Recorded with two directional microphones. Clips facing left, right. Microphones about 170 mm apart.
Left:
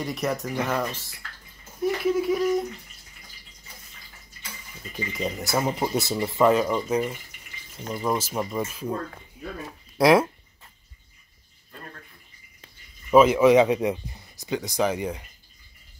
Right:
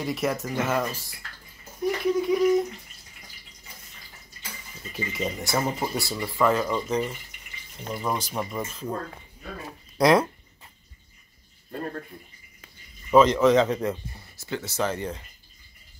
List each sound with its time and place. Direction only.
0.0 s speech: centre (ahead or behind)
4.9 s speech: centre (ahead or behind)
5.6 s speech: 15° left (ahead or behind)
9.9 s speech: 5° left (ahead or behind)
11.7 s speech: 40° right (ahead or behind)
13.1 s speech: 10° left (ahead or behind)